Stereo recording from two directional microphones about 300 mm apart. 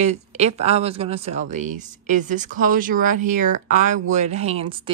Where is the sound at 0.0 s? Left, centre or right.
Right.